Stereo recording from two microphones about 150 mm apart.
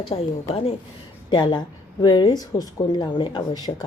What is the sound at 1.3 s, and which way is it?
Speech, 30° left (ahead or behind).